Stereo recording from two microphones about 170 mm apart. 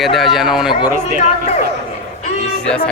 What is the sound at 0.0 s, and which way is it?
Speech, centre (ahead or behind).